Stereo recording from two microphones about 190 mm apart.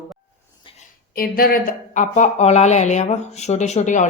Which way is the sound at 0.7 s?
50° left (ahead or behind).